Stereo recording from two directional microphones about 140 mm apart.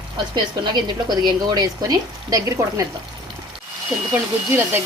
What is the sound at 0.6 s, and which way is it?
Speech, 30° right (ahead or behind).